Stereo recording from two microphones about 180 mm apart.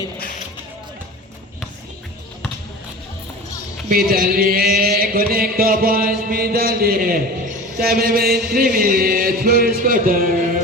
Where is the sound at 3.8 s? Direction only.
55° right (ahead or behind).